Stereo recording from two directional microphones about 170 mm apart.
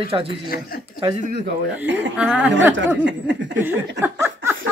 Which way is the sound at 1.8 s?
90° right.